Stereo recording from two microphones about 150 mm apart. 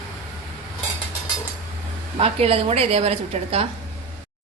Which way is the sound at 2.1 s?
40° right (ahead or behind).